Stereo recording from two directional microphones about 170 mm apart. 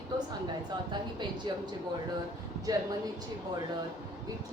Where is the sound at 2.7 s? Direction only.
20° right (ahead or behind).